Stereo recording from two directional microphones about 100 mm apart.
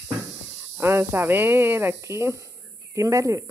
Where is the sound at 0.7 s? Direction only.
25° right (ahead or behind).